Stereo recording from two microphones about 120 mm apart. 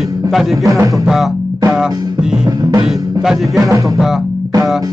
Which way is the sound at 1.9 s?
35° right (ahead or behind).